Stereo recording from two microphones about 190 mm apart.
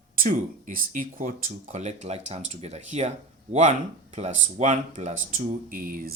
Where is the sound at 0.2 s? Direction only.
45° right (ahead or behind).